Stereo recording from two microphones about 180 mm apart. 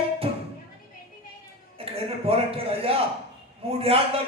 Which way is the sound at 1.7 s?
30° right (ahead or behind).